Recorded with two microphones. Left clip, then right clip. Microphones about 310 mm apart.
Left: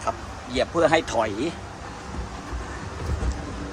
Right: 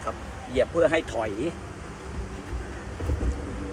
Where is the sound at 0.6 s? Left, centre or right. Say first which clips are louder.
Left 2 dB; centre.